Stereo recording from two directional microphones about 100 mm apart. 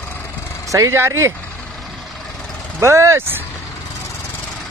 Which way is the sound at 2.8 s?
30° right (ahead or behind).